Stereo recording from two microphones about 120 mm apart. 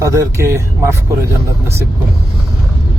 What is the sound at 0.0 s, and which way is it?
Speech, 25° right (ahead or behind).